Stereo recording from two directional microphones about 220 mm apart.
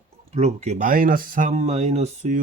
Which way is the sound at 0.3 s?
30° right (ahead or behind).